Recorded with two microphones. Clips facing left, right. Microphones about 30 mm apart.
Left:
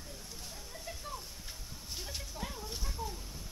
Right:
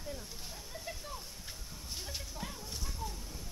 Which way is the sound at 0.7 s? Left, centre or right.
Centre.